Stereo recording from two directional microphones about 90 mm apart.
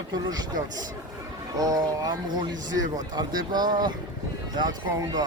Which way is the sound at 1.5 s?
40° right (ahead or behind).